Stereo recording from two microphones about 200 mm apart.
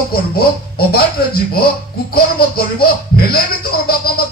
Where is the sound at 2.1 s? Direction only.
50° left (ahead or behind).